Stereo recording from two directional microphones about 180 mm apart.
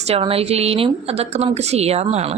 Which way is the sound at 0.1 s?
35° right (ahead or behind).